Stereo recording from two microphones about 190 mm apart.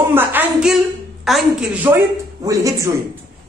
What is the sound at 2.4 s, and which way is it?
Speech, 15° right (ahead or behind).